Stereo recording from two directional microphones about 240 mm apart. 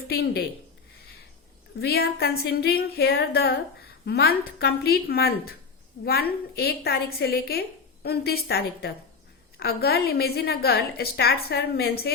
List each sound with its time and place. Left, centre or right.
0.1 s a woman's voice: left
1.8 s a woman's voice: left